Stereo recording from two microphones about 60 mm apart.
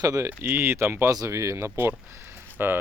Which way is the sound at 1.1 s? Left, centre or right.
Right.